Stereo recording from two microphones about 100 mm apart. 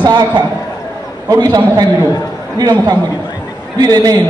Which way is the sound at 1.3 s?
40° right (ahead or behind).